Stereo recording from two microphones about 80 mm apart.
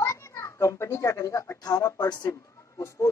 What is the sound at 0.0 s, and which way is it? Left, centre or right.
A child's voice, left.